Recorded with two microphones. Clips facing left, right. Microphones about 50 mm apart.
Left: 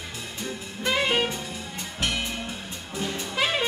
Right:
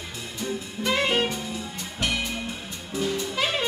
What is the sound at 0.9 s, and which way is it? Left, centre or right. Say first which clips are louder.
Jazz: even; centre.